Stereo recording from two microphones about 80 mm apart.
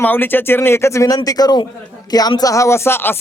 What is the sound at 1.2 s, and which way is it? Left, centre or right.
A man's voice, left.